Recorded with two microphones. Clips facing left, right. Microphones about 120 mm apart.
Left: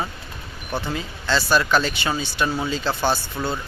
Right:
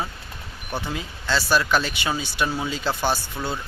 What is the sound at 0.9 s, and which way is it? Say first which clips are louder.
Speech: left 2 dB; 5° right (ahead or behind).